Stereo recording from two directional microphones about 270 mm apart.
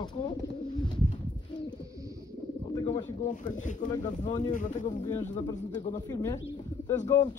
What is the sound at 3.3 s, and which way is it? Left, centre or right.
Speech, left.